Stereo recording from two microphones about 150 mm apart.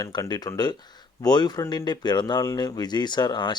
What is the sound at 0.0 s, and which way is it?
Speech, 25° left (ahead or behind).